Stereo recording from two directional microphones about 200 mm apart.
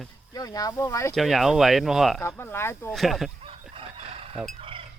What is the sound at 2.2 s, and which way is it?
Speech, 10° left (ahead or behind).